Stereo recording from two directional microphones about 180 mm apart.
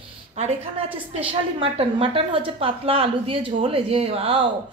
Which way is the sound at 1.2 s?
30° right (ahead or behind).